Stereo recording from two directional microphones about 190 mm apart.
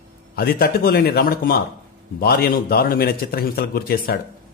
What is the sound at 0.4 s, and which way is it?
A man's voice, 50° left (ahead or behind).